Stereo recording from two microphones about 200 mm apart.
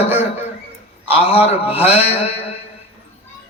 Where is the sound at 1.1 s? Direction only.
30° left (ahead or behind).